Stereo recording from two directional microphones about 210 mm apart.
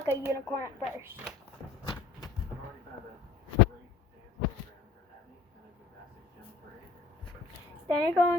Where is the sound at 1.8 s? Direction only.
20° left (ahead or behind).